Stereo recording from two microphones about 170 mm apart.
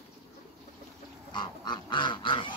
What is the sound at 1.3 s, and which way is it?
Goose, 25° left (ahead or behind).